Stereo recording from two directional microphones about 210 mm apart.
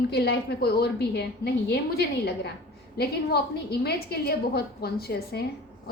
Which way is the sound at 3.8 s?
50° left (ahead or behind).